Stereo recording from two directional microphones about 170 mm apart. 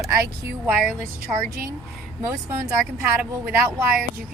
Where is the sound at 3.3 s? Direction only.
15° right (ahead or behind).